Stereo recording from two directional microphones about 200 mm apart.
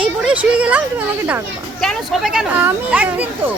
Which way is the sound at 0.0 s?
5° right (ahead or behind).